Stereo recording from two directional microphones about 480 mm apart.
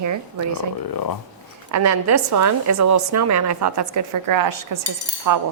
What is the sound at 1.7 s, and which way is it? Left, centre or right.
A woman's voice, right.